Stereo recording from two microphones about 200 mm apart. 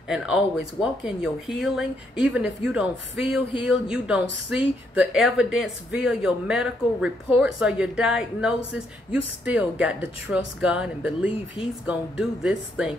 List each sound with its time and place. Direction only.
0.1 s speech: 5° right (ahead or behind)